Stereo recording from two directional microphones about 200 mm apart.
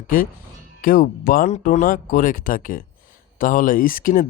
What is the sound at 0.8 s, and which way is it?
Speech, 45° left (ahead or behind).